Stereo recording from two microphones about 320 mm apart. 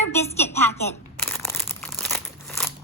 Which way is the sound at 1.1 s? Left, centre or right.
Centre.